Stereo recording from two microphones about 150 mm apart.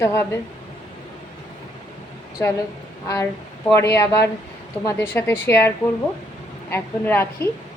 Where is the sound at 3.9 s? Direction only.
20° left (ahead or behind).